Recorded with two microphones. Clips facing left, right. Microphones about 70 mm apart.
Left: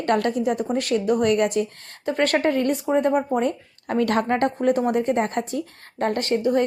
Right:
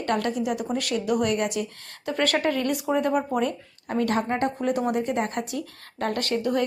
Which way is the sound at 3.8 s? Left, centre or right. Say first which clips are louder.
Left 3 dB; left.